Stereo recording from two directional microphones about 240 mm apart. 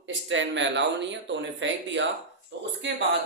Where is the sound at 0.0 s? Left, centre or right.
Right.